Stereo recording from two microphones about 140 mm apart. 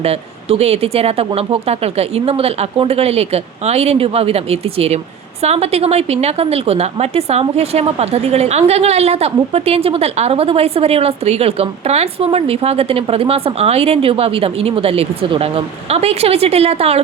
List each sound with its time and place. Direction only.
0.0 s a woman's voice: 45° right (ahead or behind)